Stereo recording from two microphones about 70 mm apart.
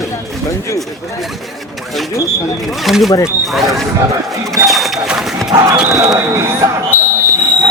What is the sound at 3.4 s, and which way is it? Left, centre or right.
Speech, centre.